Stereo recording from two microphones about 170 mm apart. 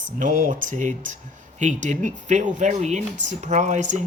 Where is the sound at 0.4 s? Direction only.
50° right (ahead or behind).